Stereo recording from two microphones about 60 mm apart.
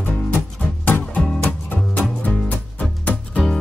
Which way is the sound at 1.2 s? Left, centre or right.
Centre.